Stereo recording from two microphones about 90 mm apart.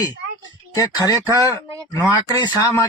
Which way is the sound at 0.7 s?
40° left (ahead or behind).